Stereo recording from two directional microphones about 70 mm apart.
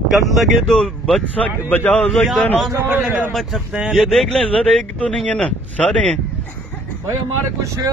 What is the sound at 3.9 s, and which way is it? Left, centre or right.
Speech, centre.